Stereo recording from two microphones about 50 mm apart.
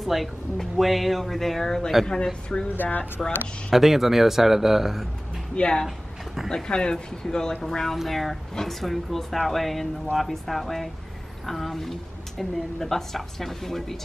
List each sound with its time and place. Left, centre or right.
0.0 s a woman's voice: centre
2.7 s speech: left
3.2 s speech: centre
3.7 s a woman's voice: centre
5.6 s a woman's voice: centre